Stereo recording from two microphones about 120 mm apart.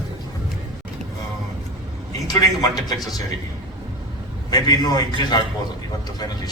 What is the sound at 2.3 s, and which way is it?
Speech, 30° left (ahead or behind).